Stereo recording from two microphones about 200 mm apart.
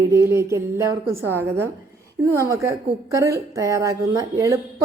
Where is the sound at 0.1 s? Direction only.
15° right (ahead or behind).